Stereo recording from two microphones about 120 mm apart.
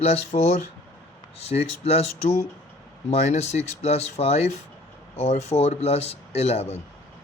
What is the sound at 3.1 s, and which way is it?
Speech, 65° left (ahead or behind).